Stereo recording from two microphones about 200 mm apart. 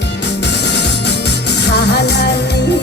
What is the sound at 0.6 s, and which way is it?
Music, 55° left (ahead or behind).